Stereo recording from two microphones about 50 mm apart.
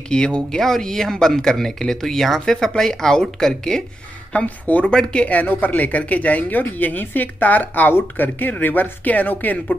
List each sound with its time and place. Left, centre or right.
0.1 s speech: centre
4.3 s speech: left